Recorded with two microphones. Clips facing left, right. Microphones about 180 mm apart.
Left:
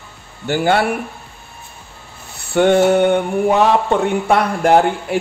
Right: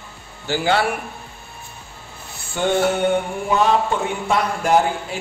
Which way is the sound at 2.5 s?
60° left (ahead or behind).